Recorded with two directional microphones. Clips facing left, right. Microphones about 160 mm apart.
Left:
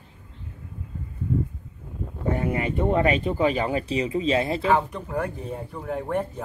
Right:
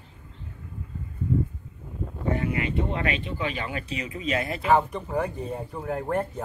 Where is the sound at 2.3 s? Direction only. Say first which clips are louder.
Left 2 dB; 45° left (ahead or behind); by 4.6 s 30° left (ahead or behind).